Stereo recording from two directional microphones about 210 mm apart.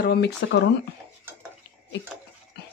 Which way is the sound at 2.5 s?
50° left (ahead or behind).